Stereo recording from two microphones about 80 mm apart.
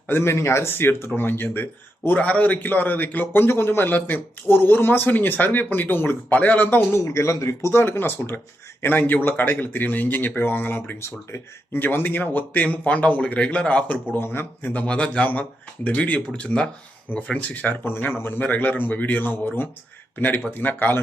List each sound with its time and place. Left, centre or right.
0.1 s speech: left
7.0 s speech: left
7.7 s speech: left